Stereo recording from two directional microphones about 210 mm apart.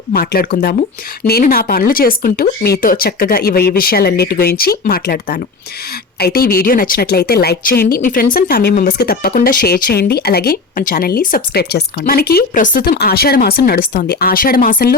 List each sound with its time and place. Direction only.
0.1 s a woman's voice: 45° left (ahead or behind)